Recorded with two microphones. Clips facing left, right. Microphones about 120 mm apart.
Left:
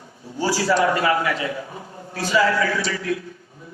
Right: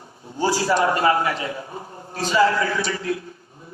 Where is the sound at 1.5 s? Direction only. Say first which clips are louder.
Even; 35° right (ahead or behind).